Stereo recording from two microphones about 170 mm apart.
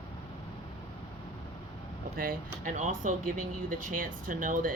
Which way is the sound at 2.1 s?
60° right (ahead or behind).